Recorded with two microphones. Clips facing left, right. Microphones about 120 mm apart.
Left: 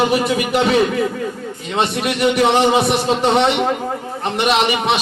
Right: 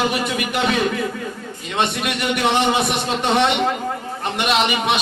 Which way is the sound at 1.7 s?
30° left (ahead or behind).